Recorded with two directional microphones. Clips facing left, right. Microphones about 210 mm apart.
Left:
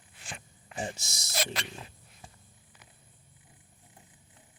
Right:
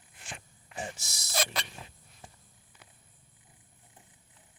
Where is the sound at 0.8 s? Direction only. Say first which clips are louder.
Left 3 dB; 25° left (ahead or behind).